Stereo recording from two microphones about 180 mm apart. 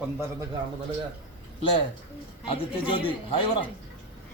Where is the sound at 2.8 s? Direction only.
30° left (ahead or behind).